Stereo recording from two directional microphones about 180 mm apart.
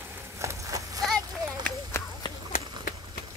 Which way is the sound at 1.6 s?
15° left (ahead or behind).